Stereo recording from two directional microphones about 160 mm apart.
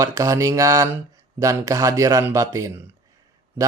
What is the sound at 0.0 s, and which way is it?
Speech, 20° right (ahead or behind).